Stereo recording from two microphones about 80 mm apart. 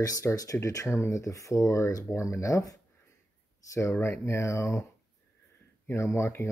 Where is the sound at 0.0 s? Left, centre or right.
Left.